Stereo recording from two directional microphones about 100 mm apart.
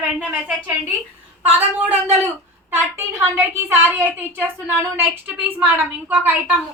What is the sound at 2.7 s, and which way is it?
A woman's voice, 25° right (ahead or behind).